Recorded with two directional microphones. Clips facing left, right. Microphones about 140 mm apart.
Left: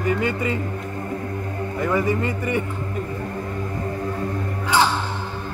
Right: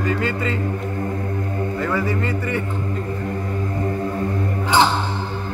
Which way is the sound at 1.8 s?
15° left (ahead or behind).